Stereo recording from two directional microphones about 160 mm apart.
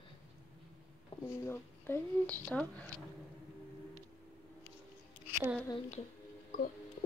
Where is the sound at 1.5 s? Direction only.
15° left (ahead or behind).